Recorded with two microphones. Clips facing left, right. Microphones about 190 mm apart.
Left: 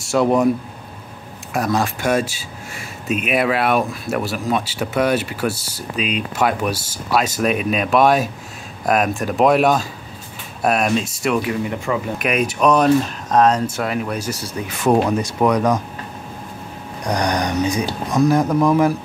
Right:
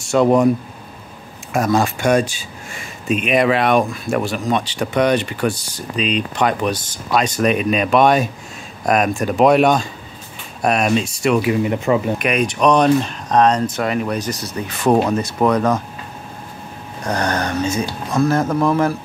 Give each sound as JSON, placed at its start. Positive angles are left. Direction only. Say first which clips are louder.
{"t": 0.0, "sound": "speech", "louder": "right 2 dB", "side_deg": 0}
{"t": 1.5, "sound": "speech", "louder": "right 3 dB", "side_deg": 0}
{"t": 11.9, "sound": "speech", "louder": "right 5 dB", "side_deg": -30}
{"t": 12.2, "sound": "speech", "louder": "right 1 dB", "side_deg": 5}
{"t": 17.0, "sound": "speech", "louder": "even", "side_deg": 15}